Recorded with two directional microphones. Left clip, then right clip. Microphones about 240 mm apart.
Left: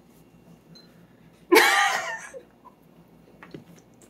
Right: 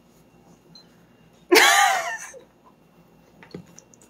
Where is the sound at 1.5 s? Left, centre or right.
Right.